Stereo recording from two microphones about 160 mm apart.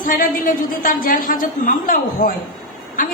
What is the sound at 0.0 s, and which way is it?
A man's voice, 60° left (ahead or behind).